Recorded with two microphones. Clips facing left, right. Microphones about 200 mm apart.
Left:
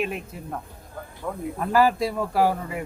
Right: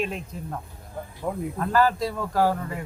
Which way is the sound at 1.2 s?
25° right (ahead or behind).